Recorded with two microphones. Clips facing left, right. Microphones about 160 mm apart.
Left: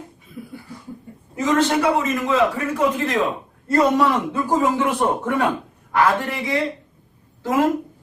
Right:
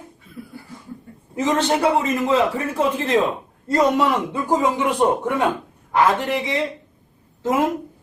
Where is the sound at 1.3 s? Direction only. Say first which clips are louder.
Left 1 dB; 25° right (ahead or behind).